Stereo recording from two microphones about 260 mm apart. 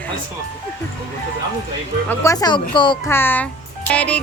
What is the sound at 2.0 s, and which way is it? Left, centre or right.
Speech, centre.